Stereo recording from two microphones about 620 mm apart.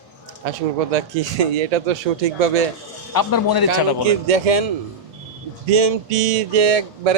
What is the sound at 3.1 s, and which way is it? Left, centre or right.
Speech, left.